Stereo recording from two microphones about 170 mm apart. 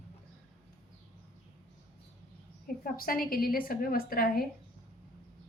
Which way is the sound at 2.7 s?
60° left (ahead or behind).